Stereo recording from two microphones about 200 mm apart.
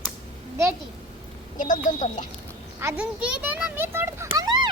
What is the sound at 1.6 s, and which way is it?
Speech, 40° left (ahead or behind).